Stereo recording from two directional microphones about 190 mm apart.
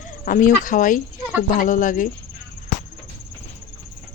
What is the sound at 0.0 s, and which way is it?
Speech, 45° left (ahead or behind).